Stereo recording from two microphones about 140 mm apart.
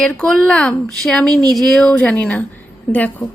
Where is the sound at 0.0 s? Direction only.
5° left (ahead or behind).